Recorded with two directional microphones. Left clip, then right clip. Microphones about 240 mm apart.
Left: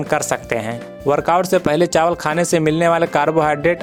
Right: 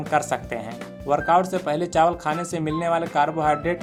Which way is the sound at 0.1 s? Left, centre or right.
Left.